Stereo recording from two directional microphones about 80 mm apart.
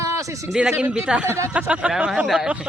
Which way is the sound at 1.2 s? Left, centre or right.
Right.